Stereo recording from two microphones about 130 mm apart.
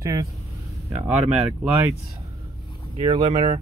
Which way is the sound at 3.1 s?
30° right (ahead or behind).